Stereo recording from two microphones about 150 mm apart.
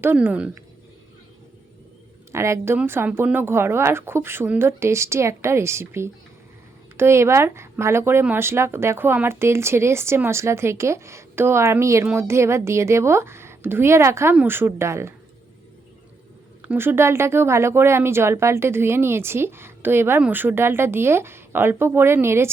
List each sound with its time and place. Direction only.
0.0 s speech: 10° right (ahead or behind)
2.3 s speech: 20° right (ahead or behind)
16.6 s speech: 15° right (ahead or behind)